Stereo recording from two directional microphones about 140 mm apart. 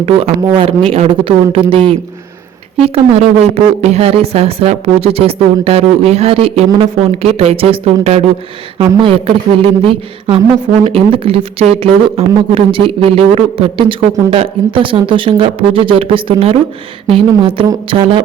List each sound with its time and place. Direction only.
0.0 s a woman's voice: 45° right (ahead or behind)